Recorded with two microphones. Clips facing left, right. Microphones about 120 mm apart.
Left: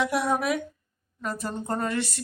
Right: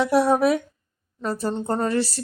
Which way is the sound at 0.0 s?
35° right (ahead or behind).